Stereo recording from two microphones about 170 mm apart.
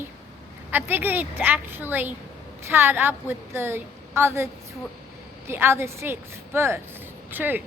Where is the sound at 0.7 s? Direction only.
10° right (ahead or behind).